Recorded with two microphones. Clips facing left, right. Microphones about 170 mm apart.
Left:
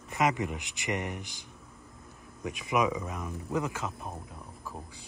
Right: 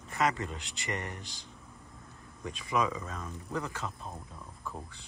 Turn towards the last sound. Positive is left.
turn(degrees=5)  # may be behind; listen again after turning